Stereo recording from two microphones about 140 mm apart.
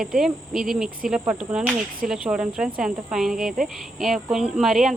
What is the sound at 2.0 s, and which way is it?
Speech, 5° right (ahead or behind).